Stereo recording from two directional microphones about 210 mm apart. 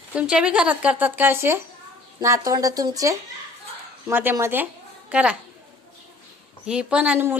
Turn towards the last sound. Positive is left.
turn(degrees=-10)  # may be behind; listen again after turning